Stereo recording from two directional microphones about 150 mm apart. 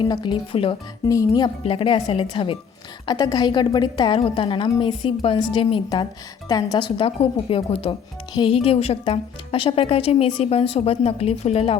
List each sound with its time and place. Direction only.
0.0 s a woman's voice: 30° left (ahead or behind)
1.0 s speech: 20° left (ahead or behind)
1.6 s a woman's voice: 35° left (ahead or behind)